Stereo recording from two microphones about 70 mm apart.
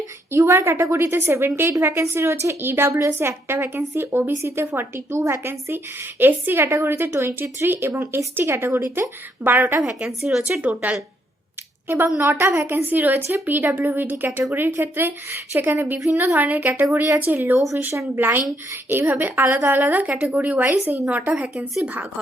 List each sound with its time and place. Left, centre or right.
0.3 s a woman's voice: right
10.1 s speech: centre
10.6 s speech: centre
11.9 s a woman's voice: right; by 21.7 s centre